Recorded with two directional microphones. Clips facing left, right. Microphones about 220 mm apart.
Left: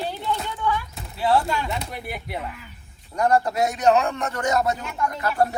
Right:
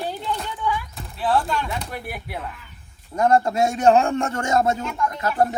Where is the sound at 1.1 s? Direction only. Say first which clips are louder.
Left 1 dB; centre (ahead or behind).